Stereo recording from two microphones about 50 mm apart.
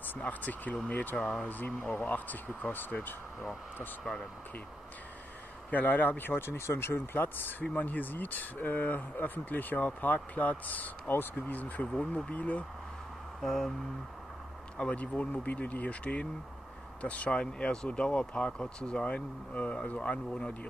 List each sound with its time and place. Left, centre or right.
0.2 s speech: left
4.0 s speech: centre
5.7 s speech: left
7.2 s speech: left
13.4 s a sound: centre
14.8 s speech: left
17.4 s speech: centre